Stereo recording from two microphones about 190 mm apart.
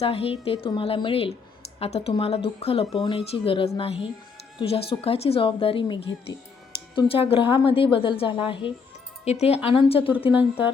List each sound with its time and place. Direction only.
0.0 s a woman's voice: 30° left (ahead or behind)
6.0 s speech: 65° left (ahead or behind)
6.9 s a woman's voice: 30° left (ahead or behind)